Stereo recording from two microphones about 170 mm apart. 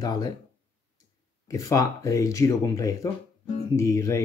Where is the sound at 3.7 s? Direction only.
20° left (ahead or behind).